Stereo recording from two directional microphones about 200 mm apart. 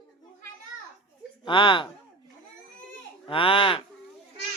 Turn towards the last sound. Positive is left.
turn(degrees=25)  # may be behind; listen again after turning